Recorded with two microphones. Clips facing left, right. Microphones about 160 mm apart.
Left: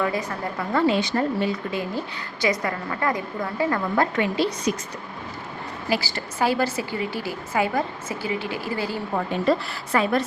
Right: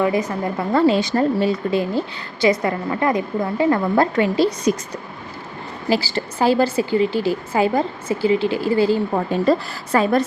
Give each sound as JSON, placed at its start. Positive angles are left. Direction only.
{"t": 0.0, "sound": "speech", "side_deg": -20}
{"t": 0.7, "sound": "a woman's voice", "side_deg": -35}
{"t": 5.9, "sound": "speech", "side_deg": -30}
{"t": 9.5, "sound": "a woman's voice", "side_deg": -40}